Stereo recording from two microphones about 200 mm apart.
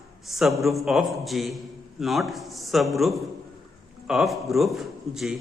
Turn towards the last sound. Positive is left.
turn(degrees=0)  # may be behind; listen again after turning